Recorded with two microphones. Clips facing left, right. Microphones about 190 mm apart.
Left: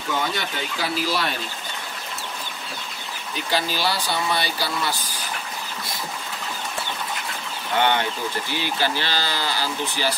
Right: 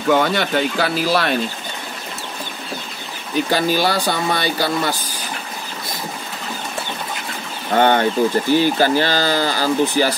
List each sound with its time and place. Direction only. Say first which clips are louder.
0.1 s speech: right 10 dB; 75° right (ahead or behind)
3.4 s speech: right 5 dB; 50° right (ahead or behind)
7.7 s speech: right 7 dB; 45° right (ahead or behind)